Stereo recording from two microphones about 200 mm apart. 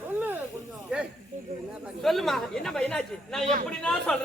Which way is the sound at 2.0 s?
Centre (ahead or behind).